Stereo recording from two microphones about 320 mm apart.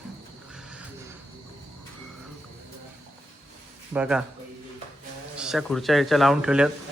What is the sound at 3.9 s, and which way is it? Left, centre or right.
Speech, centre.